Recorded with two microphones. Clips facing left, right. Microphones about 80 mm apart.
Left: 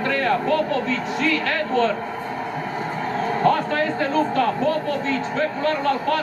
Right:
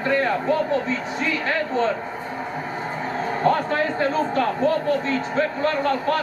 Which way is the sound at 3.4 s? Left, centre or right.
Right.